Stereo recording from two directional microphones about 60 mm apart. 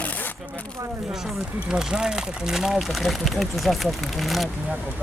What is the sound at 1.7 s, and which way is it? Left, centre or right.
Speech, centre.